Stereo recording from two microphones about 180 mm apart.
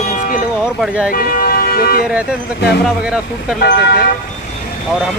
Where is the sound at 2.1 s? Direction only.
5° right (ahead or behind).